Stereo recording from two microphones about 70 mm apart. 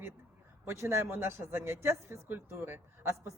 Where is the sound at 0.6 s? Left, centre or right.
Right.